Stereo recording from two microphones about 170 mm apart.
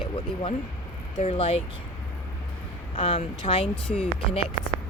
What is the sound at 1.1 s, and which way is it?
Speech, 35° left (ahead or behind).